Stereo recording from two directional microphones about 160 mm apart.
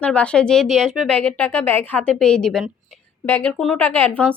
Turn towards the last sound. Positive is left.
turn(degrees=10)  # may be behind; listen again after turning